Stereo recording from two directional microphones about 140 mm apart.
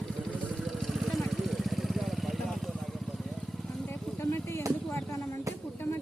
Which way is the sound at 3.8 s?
10° left (ahead or behind).